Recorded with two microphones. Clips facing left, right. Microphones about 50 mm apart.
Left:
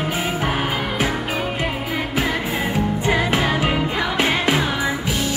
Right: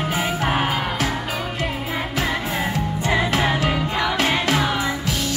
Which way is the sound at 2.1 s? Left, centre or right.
Centre.